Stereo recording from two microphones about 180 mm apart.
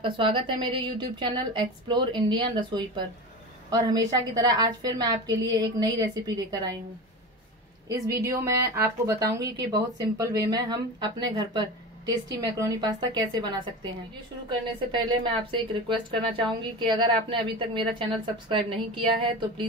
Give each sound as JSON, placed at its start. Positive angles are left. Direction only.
{"t": 0.0, "sound": "a woman's voice", "side_deg": -30}
{"t": 7.9, "sound": "a woman's voice", "side_deg": -15}
{"t": 14.9, "sound": "a woman's voice", "side_deg": -30}